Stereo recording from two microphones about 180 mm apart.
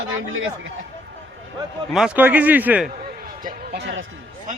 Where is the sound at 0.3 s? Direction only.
90° right.